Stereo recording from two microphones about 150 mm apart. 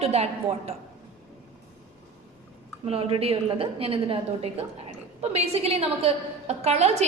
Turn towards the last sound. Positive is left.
turn(degrees=-45)  # may be behind; listen again after turning